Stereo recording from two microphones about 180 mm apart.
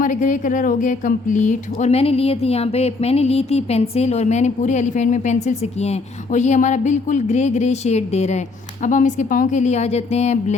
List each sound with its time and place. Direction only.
0.0 s a woman's voice: 45° left (ahead or behind)